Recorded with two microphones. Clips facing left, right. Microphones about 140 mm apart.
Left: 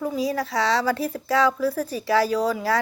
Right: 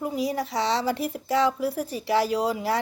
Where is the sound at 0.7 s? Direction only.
20° right (ahead or behind).